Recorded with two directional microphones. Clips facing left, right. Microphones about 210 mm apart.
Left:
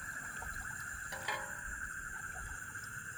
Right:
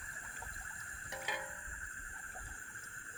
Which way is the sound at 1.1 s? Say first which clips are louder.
Right 1 dB; 20° right (ahead or behind).